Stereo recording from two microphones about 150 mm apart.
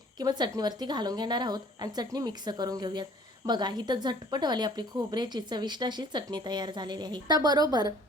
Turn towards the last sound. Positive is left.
turn(degrees=-25)  # may be behind; listen again after turning